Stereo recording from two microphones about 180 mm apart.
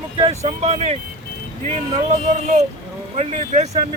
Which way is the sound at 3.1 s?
40° right (ahead or behind).